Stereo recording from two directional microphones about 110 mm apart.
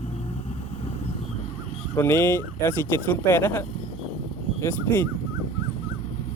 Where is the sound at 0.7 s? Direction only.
70° left (ahead or behind).